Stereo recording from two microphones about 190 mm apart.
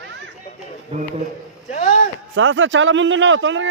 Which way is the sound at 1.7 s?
40° left (ahead or behind).